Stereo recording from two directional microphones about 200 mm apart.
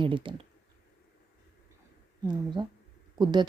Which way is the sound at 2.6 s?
25° right (ahead or behind).